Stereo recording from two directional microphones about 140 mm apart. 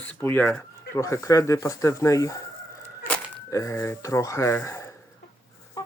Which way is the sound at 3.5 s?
25° left (ahead or behind).